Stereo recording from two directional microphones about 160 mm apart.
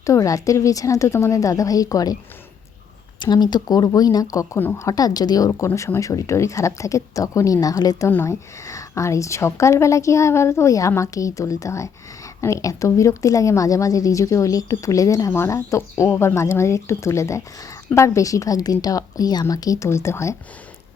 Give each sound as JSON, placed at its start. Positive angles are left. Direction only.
{"t": 0.0, "sound": "speech", "side_deg": 20}
{"t": 3.2, "sound": "speech", "side_deg": 25}